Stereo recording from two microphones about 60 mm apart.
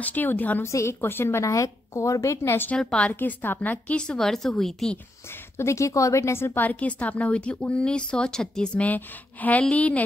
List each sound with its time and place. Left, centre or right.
0.0 s speech: left
0.7 s a woman's voice: left
1.4 s a woman's voice: left
2.8 s a woman's voice: centre
3.1 s speech: left
3.9 s a woman's voice: centre
5.6 s a woman's voice: left
6.6 s speech: left
8.8 s speech: left